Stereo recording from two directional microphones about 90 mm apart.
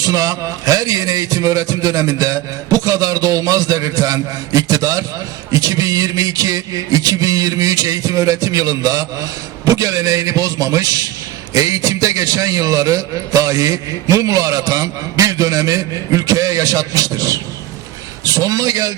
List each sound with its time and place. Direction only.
0.0 s a man's voice: 40° right (ahead or behind)